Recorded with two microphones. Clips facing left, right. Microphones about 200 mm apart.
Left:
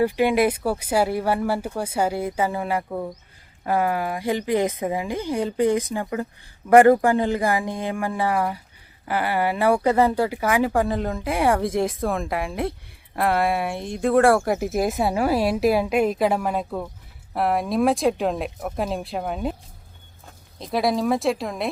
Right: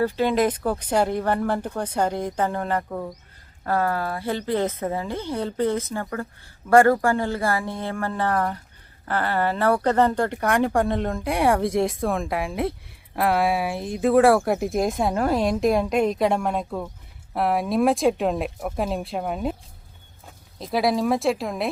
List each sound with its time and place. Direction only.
0.0 s speech: 15° left (ahead or behind)
20.6 s speech: centre (ahead or behind)